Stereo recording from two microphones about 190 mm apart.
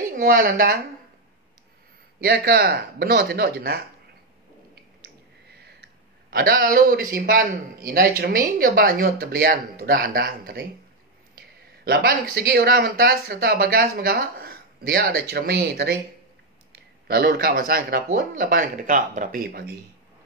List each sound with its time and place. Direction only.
0.1 s speech: 50° right (ahead or behind)
2.1 s speech: 55° right (ahead or behind)
6.3 s speech: 50° right (ahead or behind)